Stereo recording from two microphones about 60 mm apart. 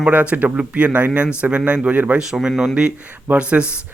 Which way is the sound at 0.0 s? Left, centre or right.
Right.